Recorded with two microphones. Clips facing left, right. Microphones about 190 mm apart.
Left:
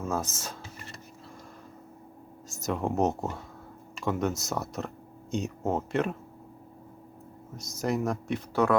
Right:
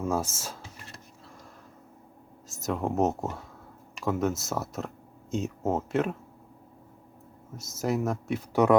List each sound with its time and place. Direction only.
0.0 s speech: 10° right (ahead or behind)
0.3 s a sound: 5° right (ahead or behind)
2.5 s speech: centre (ahead or behind)
7.5 s speech: 5° right (ahead or behind)
8.6 s speech: 15° right (ahead or behind)